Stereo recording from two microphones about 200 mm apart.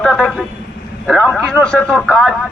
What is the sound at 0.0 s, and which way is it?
A man's voice, 5° left (ahead or behind).